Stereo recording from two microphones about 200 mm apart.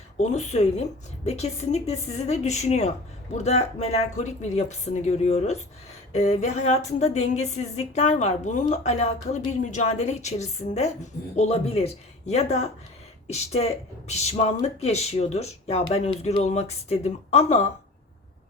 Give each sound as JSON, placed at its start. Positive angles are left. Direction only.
{"t": 0.2, "sound": "speech", "side_deg": 35}